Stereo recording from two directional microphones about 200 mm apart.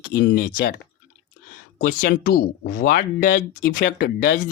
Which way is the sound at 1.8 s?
45° left (ahead or behind).